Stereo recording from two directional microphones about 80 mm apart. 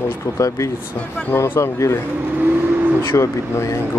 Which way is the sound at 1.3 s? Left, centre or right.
Left.